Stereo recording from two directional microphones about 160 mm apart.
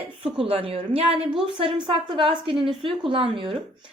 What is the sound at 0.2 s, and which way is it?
A woman's voice, 35° right (ahead or behind).